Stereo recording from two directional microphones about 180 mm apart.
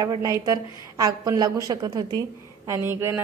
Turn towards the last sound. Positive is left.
turn(degrees=-15)  # may be behind; listen again after turning